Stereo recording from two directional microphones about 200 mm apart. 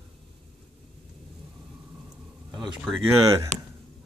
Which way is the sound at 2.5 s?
Centre (ahead or behind).